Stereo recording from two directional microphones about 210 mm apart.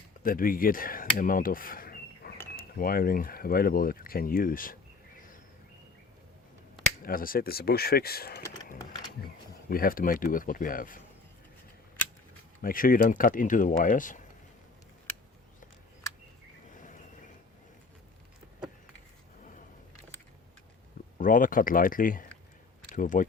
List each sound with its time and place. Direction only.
0.2 s speech: 40° left (ahead or behind)
7.0 s speech: 40° left (ahead or behind)
12.6 s speech: 40° left (ahead or behind)
21.2 s speech: 40° left (ahead or behind)